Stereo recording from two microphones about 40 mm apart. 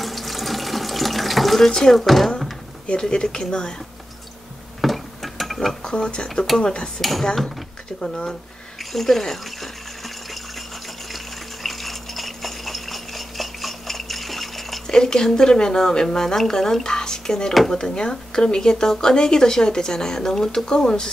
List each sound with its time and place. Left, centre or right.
0.0 s water tap: centre
1.7 s speech: centre
2.0 s speech: centre
2.9 s speech: centre
4.8 s a sound: centre
5.8 s speech: centre
7.0 s speech: centre
8.3 s water: centre
15.0 s speech: centre